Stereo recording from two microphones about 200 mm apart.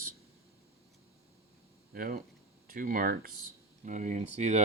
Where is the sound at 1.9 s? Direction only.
45° right (ahead or behind).